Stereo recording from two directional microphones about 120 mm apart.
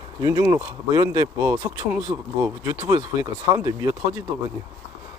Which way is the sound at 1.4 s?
15° right (ahead or behind).